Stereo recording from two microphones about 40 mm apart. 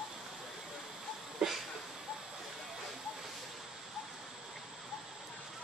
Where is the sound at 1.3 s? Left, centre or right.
Centre.